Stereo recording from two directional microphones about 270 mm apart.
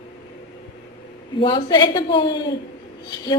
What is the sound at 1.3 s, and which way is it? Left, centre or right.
A woman's voice, centre.